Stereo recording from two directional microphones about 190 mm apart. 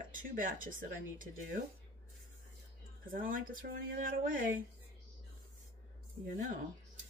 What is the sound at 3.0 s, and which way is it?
Speech, 45° right (ahead or behind).